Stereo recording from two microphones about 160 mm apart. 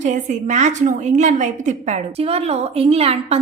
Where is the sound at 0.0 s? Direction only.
50° right (ahead or behind).